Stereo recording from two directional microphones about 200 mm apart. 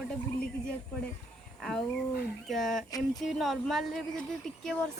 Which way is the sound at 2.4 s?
Centre (ahead or behind).